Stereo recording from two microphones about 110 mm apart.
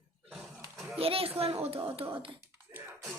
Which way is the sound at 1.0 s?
60° right (ahead or behind).